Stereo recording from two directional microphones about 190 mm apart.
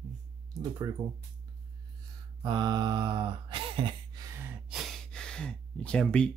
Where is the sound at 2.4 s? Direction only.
20° right (ahead or behind); by 6.3 s 5° left (ahead or behind).